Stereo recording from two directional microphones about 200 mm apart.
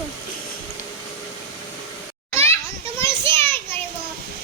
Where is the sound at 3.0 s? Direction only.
10° left (ahead or behind).